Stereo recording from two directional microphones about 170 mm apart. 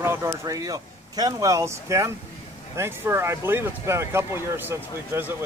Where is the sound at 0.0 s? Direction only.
15° right (ahead or behind).